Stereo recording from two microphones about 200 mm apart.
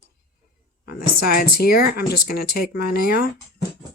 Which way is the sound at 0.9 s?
50° left (ahead or behind).